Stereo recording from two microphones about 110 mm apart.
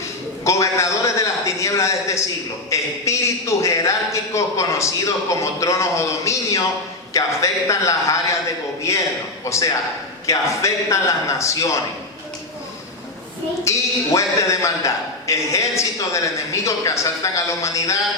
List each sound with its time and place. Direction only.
0.4 s a man's voice: 25° left (ahead or behind)
9.4 s a man's voice: 25° left (ahead or behind)
13.7 s a man's voice: 30° left (ahead or behind)